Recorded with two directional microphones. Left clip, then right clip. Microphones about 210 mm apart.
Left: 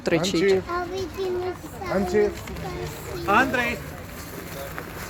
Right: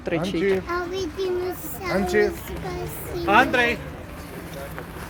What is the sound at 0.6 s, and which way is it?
Speech, 55° right (ahead or behind).